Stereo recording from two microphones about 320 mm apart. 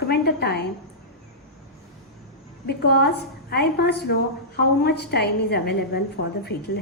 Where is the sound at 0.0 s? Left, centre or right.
Left.